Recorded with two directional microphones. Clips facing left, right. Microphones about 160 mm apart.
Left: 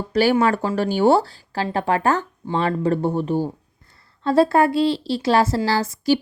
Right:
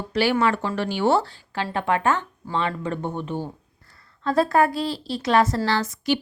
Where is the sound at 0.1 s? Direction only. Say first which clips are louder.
Left 4 dB; 40° left (ahead or behind).